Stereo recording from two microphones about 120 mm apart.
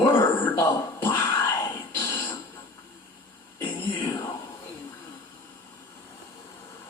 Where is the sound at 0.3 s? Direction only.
20° left (ahead or behind).